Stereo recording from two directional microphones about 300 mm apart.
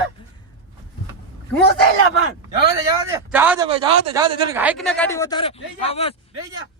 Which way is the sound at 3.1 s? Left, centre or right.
Centre.